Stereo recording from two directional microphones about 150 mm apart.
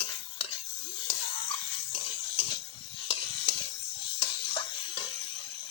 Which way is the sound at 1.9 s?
35° left (ahead or behind).